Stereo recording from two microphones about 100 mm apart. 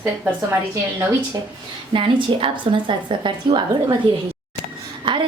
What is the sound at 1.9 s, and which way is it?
A woman's voice, 55° right (ahead or behind).